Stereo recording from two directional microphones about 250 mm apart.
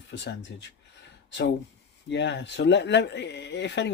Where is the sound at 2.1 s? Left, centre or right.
Left.